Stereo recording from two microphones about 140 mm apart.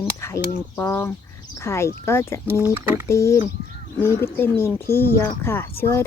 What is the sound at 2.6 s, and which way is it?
Speech, 15° right (ahead or behind).